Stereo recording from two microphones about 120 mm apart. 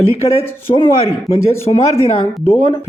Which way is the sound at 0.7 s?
45° left (ahead or behind).